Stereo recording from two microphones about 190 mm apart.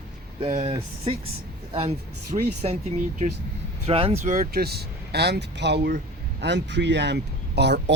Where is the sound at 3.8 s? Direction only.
30° right (ahead or behind).